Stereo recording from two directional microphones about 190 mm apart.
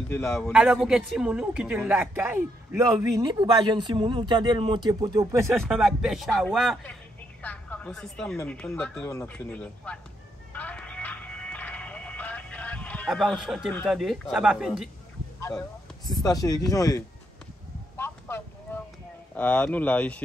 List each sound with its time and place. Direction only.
0.1 s speech: 5° left (ahead or behind)
0.5 s a woman's voice: 5° right (ahead or behind)
3.0 s speech: 20° right (ahead or behind)
5.6 s a woman's voice: centre (ahead or behind)
10.5 s music: 10° left (ahead or behind)
13.8 s a woman's voice: centre (ahead or behind)
16.1 s speech: 20° left (ahead or behind)
17.9 s a sound: 10° left (ahead or behind)
19.3 s speech: 10° left (ahead or behind)